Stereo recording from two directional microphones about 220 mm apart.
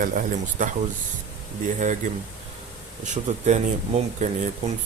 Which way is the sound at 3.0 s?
30° right (ahead or behind).